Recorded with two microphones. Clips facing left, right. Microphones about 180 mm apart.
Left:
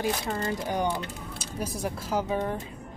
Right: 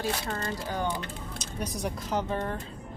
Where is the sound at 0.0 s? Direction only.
15° left (ahead or behind).